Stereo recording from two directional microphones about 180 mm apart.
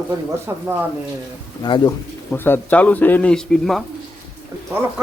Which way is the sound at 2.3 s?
10° left (ahead or behind).